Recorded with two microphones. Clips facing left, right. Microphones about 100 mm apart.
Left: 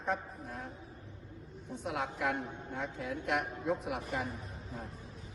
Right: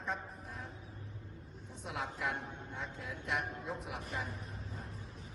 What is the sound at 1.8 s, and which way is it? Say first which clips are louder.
A woman's voice: left 4 dB; 65° left (ahead or behind).